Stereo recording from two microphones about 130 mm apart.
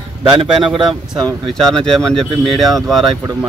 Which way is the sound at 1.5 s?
5° left (ahead or behind).